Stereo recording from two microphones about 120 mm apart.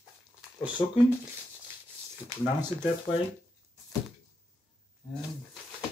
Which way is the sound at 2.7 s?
25° right (ahead or behind).